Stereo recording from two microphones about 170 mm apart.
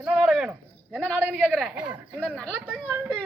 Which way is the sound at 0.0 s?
5° right (ahead or behind).